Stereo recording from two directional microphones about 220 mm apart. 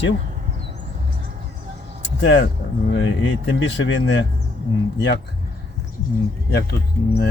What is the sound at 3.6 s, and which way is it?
Speech, 55° left (ahead or behind).